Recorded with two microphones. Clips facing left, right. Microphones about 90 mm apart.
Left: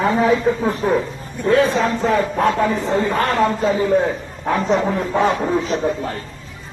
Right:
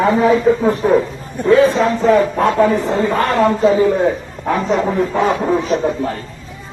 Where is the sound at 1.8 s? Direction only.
30° right (ahead or behind).